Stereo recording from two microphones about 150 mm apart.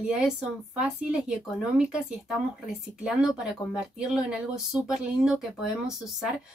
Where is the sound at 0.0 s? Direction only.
5° right (ahead or behind).